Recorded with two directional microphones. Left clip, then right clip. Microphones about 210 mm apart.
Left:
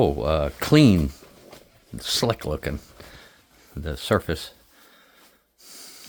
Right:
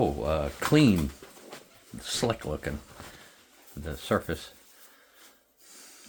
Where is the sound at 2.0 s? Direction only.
45° left (ahead or behind).